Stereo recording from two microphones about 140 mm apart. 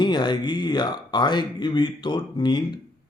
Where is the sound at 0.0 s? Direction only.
30° left (ahead or behind).